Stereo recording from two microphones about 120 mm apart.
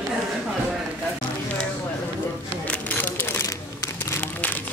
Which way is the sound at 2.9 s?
15° left (ahead or behind).